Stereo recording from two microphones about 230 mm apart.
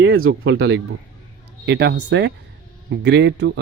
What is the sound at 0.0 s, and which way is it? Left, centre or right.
Speech, right.